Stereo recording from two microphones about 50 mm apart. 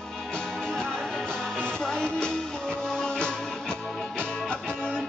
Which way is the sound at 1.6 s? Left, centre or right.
Centre.